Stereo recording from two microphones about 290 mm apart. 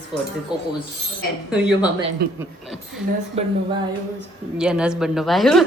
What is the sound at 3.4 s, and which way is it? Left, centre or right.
Speech, right.